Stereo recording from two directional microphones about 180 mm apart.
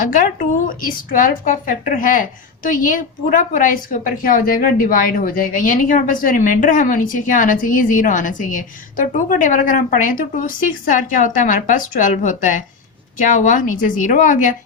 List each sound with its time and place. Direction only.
0.8 s a woman's voice: 50° left (ahead or behind)